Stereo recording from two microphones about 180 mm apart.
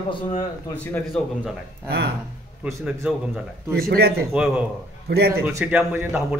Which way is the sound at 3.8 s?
60° right (ahead or behind).